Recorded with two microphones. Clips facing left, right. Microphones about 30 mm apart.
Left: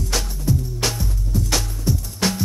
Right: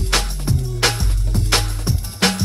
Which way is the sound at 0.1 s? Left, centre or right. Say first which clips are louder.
Right 3 dB; right.